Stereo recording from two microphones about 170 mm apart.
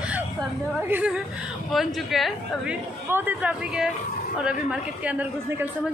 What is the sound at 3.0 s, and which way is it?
A woman's voice, 10° right (ahead or behind).